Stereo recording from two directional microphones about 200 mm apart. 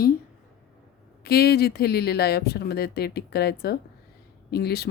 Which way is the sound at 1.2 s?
50° left (ahead or behind).